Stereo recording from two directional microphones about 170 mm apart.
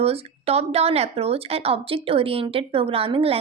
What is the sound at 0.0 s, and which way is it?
A woman's voice, 35° right (ahead or behind).